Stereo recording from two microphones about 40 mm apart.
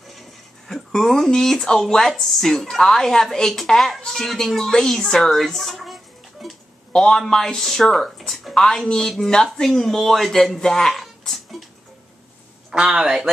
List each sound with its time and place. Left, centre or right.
0.7 s speech: centre
6.4 s a sound: centre
7.1 s speech: centre
8.6 s speech: centre
11.0 s a sound: centre
12.7 s a man's voice: right